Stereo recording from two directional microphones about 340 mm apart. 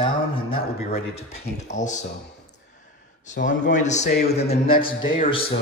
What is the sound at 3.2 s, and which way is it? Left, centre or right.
A man's voice, left.